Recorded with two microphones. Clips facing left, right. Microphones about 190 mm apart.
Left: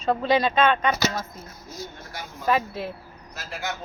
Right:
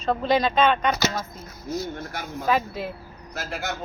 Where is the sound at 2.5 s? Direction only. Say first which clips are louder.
Even; centre (ahead or behind).